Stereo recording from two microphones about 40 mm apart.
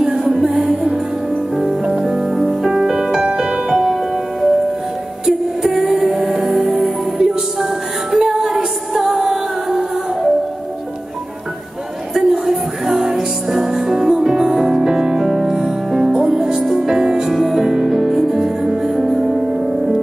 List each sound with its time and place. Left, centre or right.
0.0 s music: centre
2.0 s music: centre
3.8 s music: centre
12.1 s music: centre